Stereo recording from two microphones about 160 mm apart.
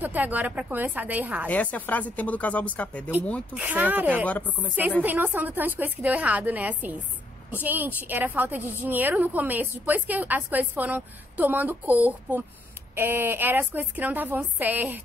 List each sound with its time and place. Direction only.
0.0 s a woman's voice: 10° right (ahead or behind)
1.5 s speech: 10° left (ahead or behind)
3.5 s a woman's voice: 10° right (ahead or behind)
4.3 s speech: 10° left (ahead or behind)
5.0 s a woman's voice: 10° right (ahead or behind)